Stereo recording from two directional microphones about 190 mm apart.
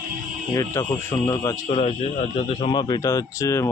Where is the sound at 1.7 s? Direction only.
30° left (ahead or behind).